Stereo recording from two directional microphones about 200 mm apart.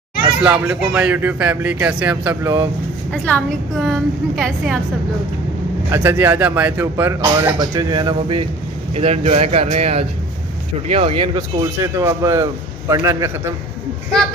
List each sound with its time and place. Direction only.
0.4 s speech: 5° right (ahead or behind)
3.1 s a woman's voice: 5° left (ahead or behind)
5.9 s speech: 10° right (ahead or behind); by 11.4 s 30° right (ahead or behind)
11.8 s speech: 15° right (ahead or behind)